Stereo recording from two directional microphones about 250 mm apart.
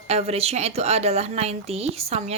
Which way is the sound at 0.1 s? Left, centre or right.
Right.